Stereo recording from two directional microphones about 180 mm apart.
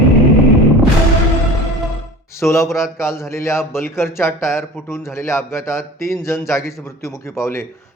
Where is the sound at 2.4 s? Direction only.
15° left (ahead or behind).